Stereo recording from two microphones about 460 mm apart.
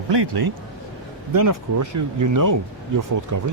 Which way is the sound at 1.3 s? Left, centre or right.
Right.